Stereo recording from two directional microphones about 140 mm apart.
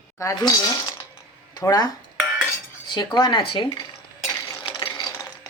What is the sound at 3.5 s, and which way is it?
Stir, 35° left (ahead or behind).